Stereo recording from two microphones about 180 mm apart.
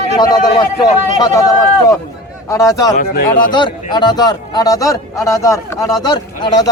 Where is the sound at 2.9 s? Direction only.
50° left (ahead or behind).